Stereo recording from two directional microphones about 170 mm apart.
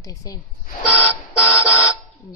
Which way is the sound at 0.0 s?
20° left (ahead or behind).